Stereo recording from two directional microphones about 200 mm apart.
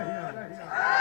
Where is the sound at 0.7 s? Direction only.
20° left (ahead or behind).